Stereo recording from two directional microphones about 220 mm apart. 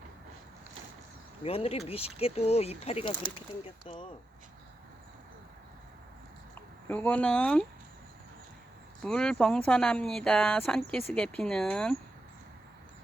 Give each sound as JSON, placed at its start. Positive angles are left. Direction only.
{"t": 1.5, "sound": "speech", "side_deg": 25}
{"t": 6.8, "sound": "speech", "side_deg": 10}
{"t": 9.0, "sound": "speech", "side_deg": 5}